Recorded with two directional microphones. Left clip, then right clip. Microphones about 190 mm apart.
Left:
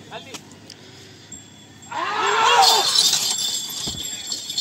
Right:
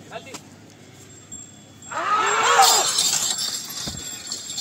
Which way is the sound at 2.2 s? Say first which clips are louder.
Left 1 dB; 5° right (ahead or behind).